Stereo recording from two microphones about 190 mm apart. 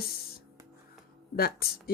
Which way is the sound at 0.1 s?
55° left (ahead or behind).